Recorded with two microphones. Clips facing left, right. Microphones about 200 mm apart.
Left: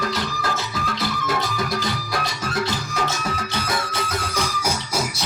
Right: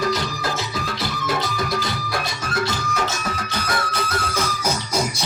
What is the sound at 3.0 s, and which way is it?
Music, 30° left (ahead or behind).